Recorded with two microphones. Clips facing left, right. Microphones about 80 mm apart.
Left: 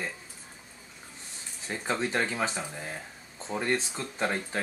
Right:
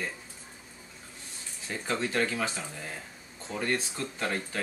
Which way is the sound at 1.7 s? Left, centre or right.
Left.